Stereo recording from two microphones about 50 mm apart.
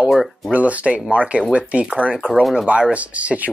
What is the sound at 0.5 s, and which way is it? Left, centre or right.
Speech, right.